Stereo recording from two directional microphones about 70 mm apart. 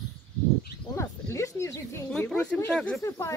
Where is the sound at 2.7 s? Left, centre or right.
Centre.